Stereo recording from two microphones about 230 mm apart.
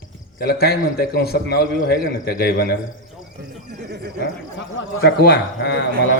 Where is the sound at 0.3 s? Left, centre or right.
Left.